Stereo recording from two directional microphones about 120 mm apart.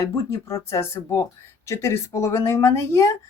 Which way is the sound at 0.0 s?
25° left (ahead or behind).